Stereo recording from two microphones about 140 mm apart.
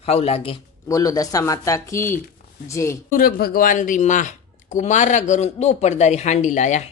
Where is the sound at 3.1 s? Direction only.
90° left; by 6.8 s 60° left (ahead or behind).